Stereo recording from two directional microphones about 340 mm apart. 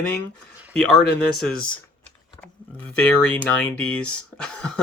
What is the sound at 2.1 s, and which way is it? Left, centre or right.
Speech, centre.